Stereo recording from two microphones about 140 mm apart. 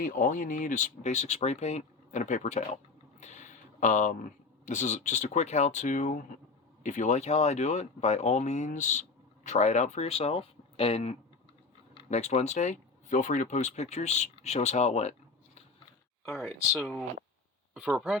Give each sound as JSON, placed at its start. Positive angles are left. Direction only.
{"t": 0.0, "sound": "speech", "side_deg": 75}
{"t": 3.2, "sound": "a sound", "side_deg": 60}
{"t": 4.6, "sound": "speech", "side_deg": 60}
{"t": 16.2, "sound": "speech", "side_deg": 5}
{"t": 17.7, "sound": "speech", "side_deg": -10}